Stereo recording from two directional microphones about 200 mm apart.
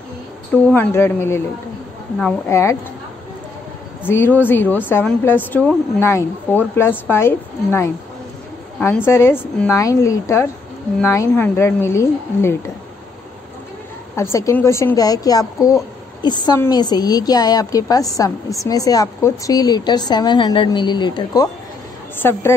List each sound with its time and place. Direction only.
0.7 s a woman's voice: 10° left (ahead or behind)
4.0 s a woman's voice: 10° left (ahead or behind)
14.1 s a woman's voice: 15° left (ahead or behind)